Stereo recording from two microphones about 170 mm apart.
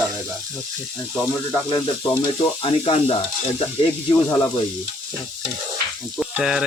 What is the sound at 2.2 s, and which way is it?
Speech, 35° left (ahead or behind).